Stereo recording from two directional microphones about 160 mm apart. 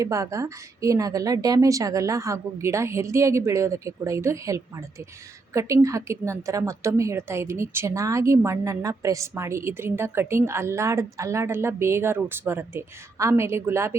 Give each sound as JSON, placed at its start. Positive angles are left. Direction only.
{"t": 0.0, "sound": "a woman's voice", "side_deg": -20}